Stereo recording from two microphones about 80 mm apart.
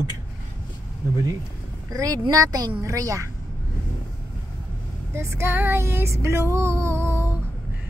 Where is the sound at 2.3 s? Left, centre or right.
Right.